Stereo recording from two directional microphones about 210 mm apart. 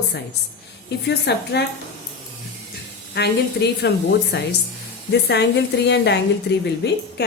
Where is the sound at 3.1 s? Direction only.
50° left (ahead or behind).